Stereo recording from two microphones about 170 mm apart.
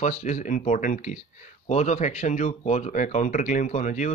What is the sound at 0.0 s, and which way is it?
Speech, 45° left (ahead or behind).